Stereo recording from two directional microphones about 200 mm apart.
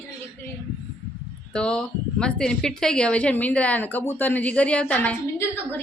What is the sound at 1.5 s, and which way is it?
Speech, 5° left (ahead or behind).